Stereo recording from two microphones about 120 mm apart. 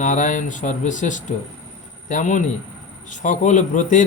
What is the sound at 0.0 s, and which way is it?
A man's voice, 90° left.